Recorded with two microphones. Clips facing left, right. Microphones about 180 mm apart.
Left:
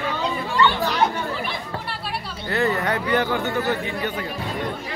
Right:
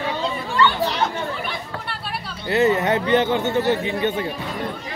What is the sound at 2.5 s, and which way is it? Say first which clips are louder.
Speech: right 4 dB; 20° right (ahead or behind).